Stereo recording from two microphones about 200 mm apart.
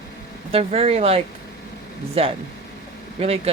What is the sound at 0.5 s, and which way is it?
Speech, 30° right (ahead or behind).